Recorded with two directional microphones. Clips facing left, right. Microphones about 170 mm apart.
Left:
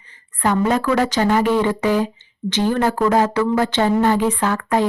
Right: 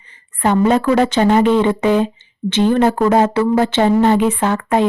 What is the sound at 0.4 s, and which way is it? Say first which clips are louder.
A woman's voice: right 4 dB; 25° right (ahead or behind).